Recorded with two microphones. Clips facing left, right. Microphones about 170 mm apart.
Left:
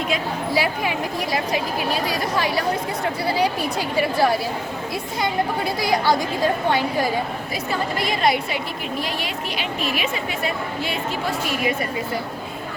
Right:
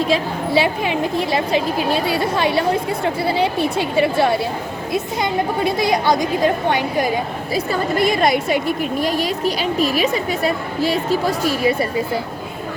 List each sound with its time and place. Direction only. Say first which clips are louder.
0.1 s a woman's voice: right 5 dB; 25° right (ahead or behind)
7.9 s a woman's voice: right 5 dB; 45° right (ahead or behind)